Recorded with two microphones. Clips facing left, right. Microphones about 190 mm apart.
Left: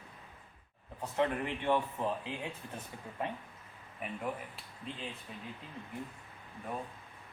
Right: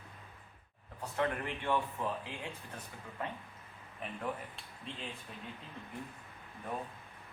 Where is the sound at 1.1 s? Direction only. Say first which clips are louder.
Left 3 dB; 20° left (ahead or behind).